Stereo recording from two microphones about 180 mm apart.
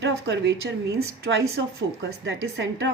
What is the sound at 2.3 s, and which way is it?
Speech, 85° right.